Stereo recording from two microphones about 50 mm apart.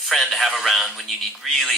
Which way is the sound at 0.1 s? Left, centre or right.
Centre.